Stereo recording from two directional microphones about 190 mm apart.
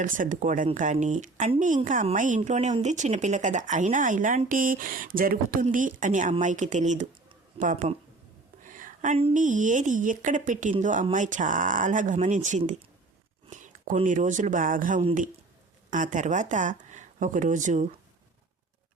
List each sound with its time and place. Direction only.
0.0 s a woman's voice: 45° right (ahead or behind)
8.6 s a sound: 45° right (ahead or behind)
9.3 s speech: 40° right (ahead or behind)